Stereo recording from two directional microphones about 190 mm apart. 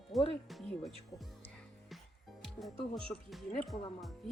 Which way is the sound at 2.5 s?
Centre (ahead or behind).